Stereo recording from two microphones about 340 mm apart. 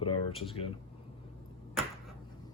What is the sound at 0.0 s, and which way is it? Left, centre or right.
Speech, centre.